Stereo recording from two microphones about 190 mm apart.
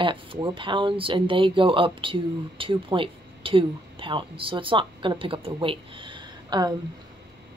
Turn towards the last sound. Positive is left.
turn(degrees=-25)  # may be behind; listen again after turning